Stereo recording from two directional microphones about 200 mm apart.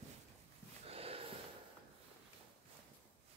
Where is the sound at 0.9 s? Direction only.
30° right (ahead or behind).